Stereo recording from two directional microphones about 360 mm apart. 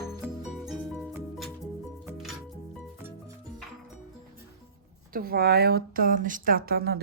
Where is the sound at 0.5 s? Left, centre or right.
Centre.